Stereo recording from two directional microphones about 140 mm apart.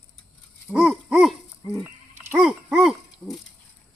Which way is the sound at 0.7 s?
5° right (ahead or behind).